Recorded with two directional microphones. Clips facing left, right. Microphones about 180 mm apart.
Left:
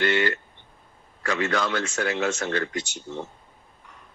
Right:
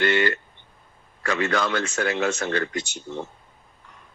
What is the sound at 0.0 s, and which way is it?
Speech, 55° right (ahead or behind).